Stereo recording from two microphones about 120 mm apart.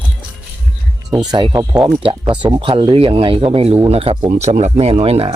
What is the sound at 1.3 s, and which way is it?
Speech, 40° right (ahead or behind).